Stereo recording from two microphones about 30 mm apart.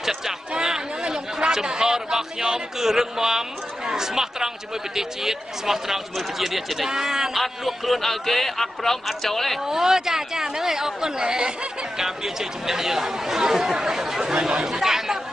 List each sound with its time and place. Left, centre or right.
0.0 s a sound: centre
1.5 s speech: right; by 6.9 s centre
6.9 s speech: centre
7.3 s a man's voice: centre
9.7 s speech: centre
12.0 s speech: centre